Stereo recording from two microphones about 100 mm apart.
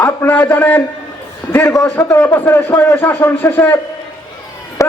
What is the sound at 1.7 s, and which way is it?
Speech, 30° left (ahead or behind).